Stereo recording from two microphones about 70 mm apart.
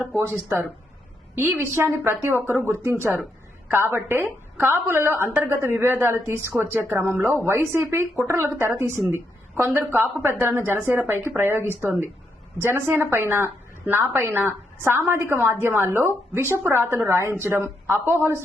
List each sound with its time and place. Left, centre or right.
0.4 s a woman's voice: right
1.7 s a woman's voice: right